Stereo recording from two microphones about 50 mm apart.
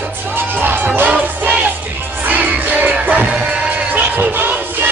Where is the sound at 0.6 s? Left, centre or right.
Right.